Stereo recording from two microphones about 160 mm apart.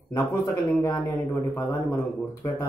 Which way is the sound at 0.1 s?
20° left (ahead or behind).